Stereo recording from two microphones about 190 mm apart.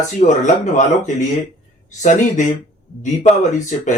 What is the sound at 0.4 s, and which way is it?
Speech, 40° left (ahead or behind).